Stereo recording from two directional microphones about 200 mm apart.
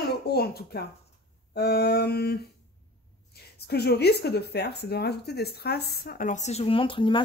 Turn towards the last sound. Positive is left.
turn(degrees=25)  # may be behind; listen again after turning